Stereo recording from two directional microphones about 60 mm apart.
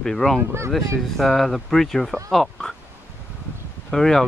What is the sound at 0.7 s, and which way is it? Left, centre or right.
Speech, centre.